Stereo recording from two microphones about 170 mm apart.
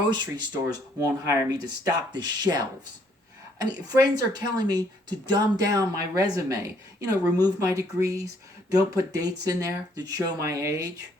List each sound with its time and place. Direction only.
0.1 s a woman's voice: 25° right (ahead or behind)